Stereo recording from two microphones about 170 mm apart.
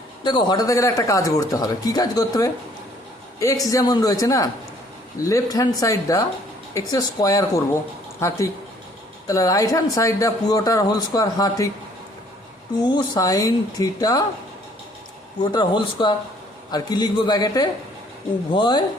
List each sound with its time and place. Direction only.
0.3 s speech: 25° left (ahead or behind)
12.9 s speech: 20° left (ahead or behind)
15.5 s speech: 25° left (ahead or behind)